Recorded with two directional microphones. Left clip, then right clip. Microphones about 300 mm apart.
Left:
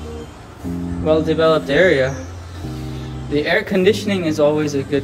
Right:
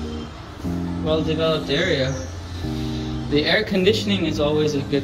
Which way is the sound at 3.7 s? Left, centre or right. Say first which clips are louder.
Left 3 dB; centre.